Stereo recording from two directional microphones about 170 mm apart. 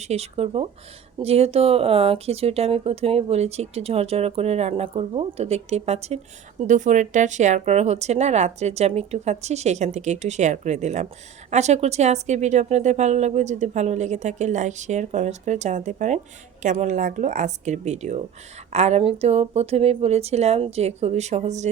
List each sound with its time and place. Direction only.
0.0 s a woman's voice: 40° right (ahead or behind)